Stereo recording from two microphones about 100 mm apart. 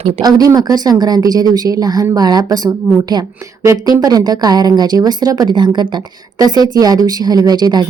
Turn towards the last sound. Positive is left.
turn(degrees=-45)  # may be behind; listen again after turning